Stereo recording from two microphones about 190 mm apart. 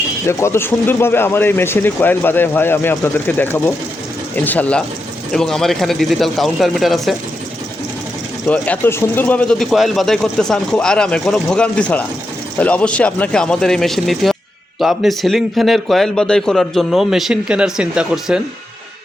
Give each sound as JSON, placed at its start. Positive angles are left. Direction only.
{"t": 0.3, "sound": "a man's voice", "side_deg": 15}
{"t": 8.4, "sound": "a man's voice", "side_deg": 5}